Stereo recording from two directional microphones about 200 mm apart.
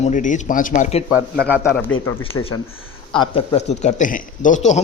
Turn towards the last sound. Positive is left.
turn(degrees=35)  # may be behind; listen again after turning